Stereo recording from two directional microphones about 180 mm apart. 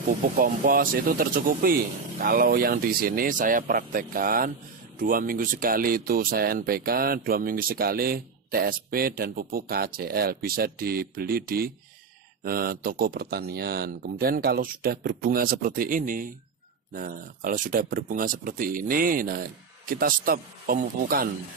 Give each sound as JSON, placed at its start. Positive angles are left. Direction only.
{"t": 0.4, "sound": "speech", "side_deg": -50}